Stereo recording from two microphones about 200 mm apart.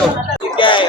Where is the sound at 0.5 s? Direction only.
25° left (ahead or behind).